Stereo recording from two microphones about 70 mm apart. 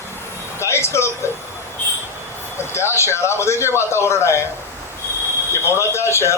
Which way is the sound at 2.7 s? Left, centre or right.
Left.